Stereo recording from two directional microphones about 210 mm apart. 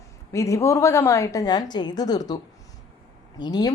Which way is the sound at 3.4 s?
20° left (ahead or behind).